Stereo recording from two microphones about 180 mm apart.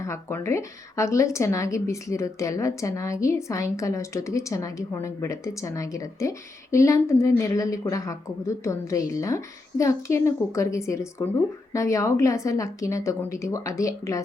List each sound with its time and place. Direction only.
0.0 s speech: 15° left (ahead or behind)